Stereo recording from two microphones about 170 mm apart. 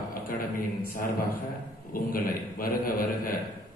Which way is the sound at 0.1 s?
60° left (ahead or behind).